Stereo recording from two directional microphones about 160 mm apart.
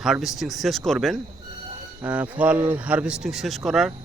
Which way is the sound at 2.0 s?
10° right (ahead or behind).